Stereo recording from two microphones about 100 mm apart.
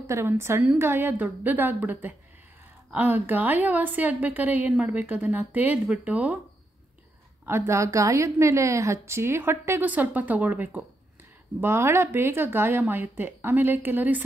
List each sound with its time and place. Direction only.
0.0 s a woman's voice: 25° right (ahead or behind)
4.7 s a woman's voice: 5° right (ahead or behind)
5.0 s a woman's voice: 20° right (ahead or behind)
7.4 s a woman's voice: 25° right (ahead or behind)